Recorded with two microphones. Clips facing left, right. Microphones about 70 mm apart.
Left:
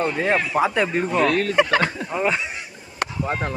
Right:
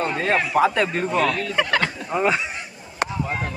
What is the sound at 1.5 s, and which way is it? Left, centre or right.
Speech, left.